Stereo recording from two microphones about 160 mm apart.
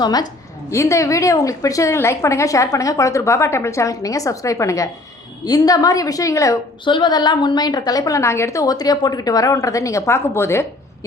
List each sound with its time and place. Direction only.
0.0 s a woman's voice: 25° left (ahead or behind)